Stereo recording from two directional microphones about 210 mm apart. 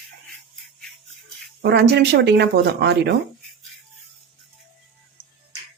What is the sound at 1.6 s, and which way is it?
Speech, 50° right (ahead or behind).